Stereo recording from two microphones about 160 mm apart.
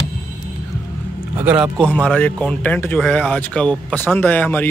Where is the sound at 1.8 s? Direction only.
5° left (ahead or behind).